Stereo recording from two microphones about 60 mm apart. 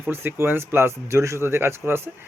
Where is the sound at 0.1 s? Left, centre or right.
Right.